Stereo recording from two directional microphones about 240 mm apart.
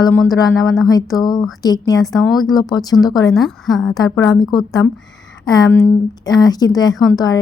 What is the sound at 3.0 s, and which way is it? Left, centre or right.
Speech, centre.